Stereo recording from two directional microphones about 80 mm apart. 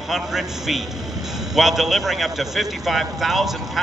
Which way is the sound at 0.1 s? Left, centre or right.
Centre.